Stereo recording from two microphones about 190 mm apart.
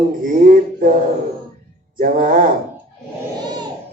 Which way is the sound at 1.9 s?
45° right (ahead or behind).